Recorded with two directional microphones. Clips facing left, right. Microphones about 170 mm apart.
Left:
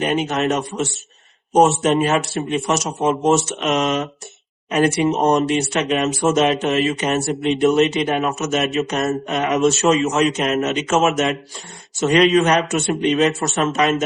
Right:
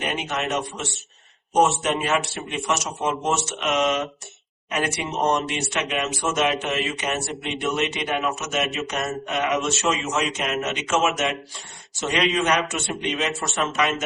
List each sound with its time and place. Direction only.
0.0 s a man's voice: 40° left (ahead or behind)